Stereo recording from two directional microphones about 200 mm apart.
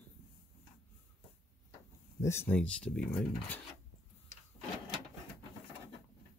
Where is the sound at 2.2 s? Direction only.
10° left (ahead or behind).